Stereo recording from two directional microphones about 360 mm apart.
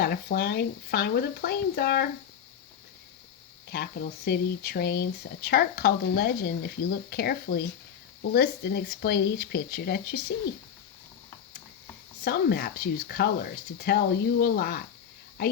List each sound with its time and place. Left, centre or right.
0.0 s speech: left
3.7 s speech: left
12.2 s speech: left